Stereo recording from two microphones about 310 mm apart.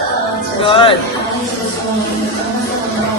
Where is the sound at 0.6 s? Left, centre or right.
Centre.